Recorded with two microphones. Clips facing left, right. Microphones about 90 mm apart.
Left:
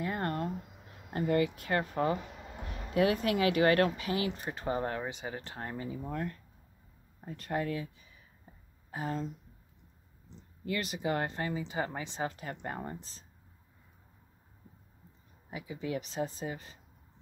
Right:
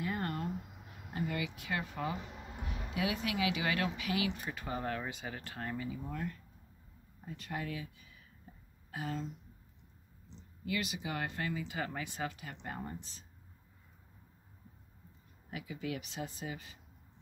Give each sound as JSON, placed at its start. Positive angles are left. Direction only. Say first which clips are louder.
{"t": 0.0, "sound": "a sound", "louder": "left 4 dB", "side_deg": 45}
{"t": 1.1, "sound": "speech", "louder": "left 9 dB", "side_deg": 45}
{"t": 4.0, "sound": "speech", "louder": "left 2 dB", "side_deg": 35}
{"t": 8.9, "sound": "speech", "louder": "left 4 dB", "side_deg": 40}
{"t": 10.6, "sound": "speech", "louder": "left 3 dB", "side_deg": 40}
{"t": 12.3, "sound": "speech", "louder": "left 5 dB", "side_deg": 45}
{"t": 15.5, "sound": "speech", "louder": "left 4 dB", "side_deg": 30}